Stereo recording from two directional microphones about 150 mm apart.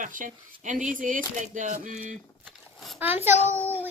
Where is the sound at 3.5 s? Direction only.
10° left (ahead or behind).